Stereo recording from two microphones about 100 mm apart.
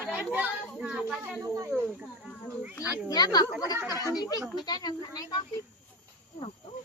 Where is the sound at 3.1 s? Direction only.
40° left (ahead or behind).